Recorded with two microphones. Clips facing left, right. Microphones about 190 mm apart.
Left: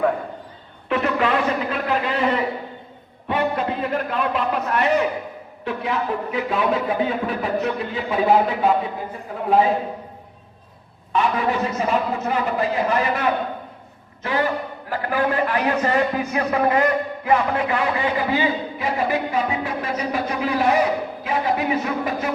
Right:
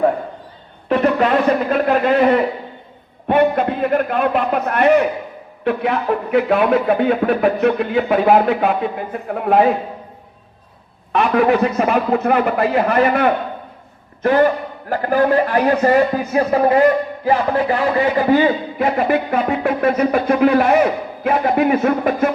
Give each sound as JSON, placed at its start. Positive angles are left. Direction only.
{"t": 0.9, "sound": "a man's voice", "side_deg": -40}
{"t": 11.1, "sound": "a man's voice", "side_deg": -65}